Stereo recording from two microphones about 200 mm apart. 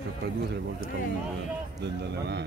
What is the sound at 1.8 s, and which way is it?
Speech, 55° right (ahead or behind).